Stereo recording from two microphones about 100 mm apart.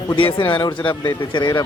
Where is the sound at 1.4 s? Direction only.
35° left (ahead or behind).